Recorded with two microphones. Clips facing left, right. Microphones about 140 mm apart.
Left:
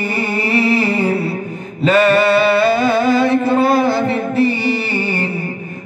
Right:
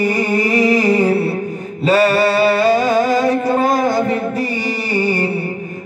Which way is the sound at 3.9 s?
40° right (ahead or behind).